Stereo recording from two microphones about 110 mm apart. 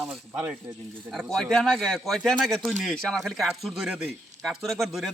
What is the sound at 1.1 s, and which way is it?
Speech, centre (ahead or behind).